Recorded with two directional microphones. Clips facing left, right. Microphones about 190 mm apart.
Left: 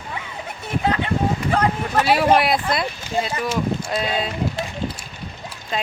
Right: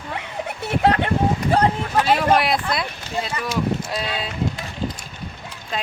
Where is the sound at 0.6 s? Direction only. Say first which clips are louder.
Right 3 dB; 65° right (ahead or behind).